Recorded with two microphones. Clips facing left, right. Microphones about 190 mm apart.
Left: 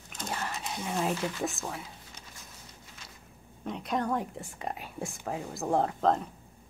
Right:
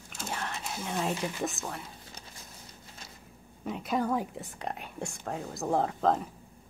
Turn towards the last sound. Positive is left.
turn(degrees=0)  # may be behind; listen again after turning